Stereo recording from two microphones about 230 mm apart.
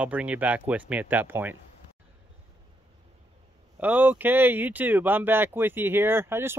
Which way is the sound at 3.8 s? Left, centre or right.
Centre.